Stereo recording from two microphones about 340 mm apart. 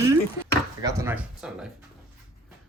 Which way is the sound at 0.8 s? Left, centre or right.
Centre.